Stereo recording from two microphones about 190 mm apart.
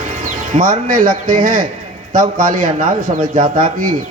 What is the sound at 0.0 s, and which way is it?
Speech, 45° right (ahead or behind).